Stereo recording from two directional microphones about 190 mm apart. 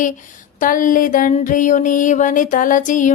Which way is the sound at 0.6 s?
45° left (ahead or behind).